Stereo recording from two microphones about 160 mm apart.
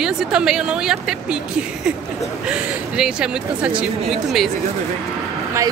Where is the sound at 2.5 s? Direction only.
5° right (ahead or behind).